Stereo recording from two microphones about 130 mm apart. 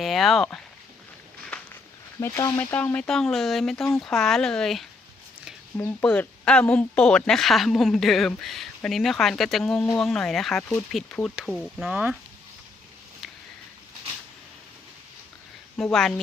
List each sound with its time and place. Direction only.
0.0 s speech: centre (ahead or behind)
2.2 s speech: 20° left (ahead or behind); by 4.9 s centre (ahead or behind)
5.7 s speech: 15° left (ahead or behind)
10.6 s speech: 15° left (ahead or behind)
11.9 s speech: 10° right (ahead or behind)
15.8 s speech: centre (ahead or behind)